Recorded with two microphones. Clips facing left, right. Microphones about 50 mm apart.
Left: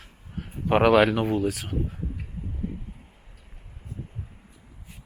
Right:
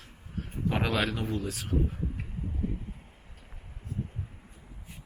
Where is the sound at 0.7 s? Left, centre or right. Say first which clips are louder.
Left 11 dB; left.